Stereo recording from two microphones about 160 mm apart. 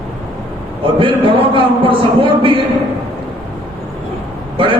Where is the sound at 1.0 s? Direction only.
35° right (ahead or behind).